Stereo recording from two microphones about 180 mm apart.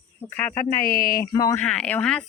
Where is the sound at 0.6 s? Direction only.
50° left (ahead or behind).